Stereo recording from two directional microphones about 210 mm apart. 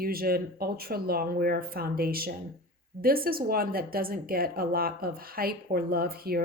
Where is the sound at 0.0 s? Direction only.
45° right (ahead or behind).